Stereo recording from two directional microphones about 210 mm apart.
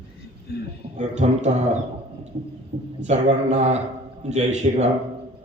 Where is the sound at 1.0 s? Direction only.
35° right (ahead or behind).